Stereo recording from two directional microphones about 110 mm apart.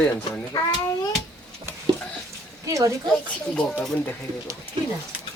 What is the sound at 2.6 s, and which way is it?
Speech, 30° right (ahead or behind).